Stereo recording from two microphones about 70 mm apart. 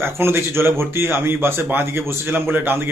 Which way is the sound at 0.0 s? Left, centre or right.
Right.